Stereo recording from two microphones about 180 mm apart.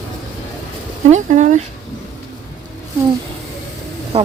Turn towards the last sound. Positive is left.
turn(degrees=-35)  # may be behind; listen again after turning